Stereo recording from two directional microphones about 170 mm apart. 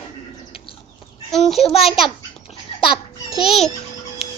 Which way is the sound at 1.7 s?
35° left (ahead or behind).